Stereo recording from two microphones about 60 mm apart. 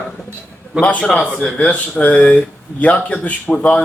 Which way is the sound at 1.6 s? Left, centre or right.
Left.